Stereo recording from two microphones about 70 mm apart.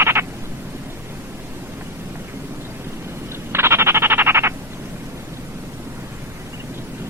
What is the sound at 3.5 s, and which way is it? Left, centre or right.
Frog, right.